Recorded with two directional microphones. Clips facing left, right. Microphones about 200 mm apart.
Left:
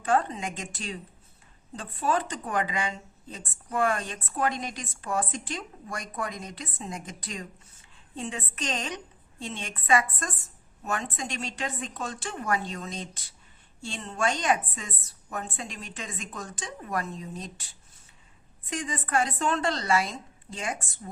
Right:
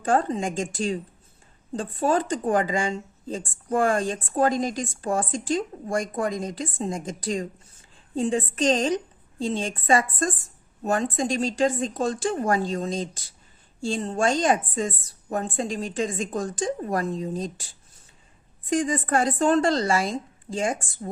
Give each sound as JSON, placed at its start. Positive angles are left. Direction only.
{"t": 0.1, "sound": "a woman's voice", "side_deg": -35}
{"t": 0.5, "sound": "a woman's voice", "side_deg": -30}
{"t": 2.6, "sound": "a woman's voice", "side_deg": -30}
{"t": 3.3, "sound": "a woman's voice", "side_deg": -40}
{"t": 4.8, "sound": "a woman's voice", "side_deg": -30}
{"t": 5.1, "sound": "a woman's voice", "side_deg": -45}
{"t": 18.7, "sound": "a woman's voice", "side_deg": -35}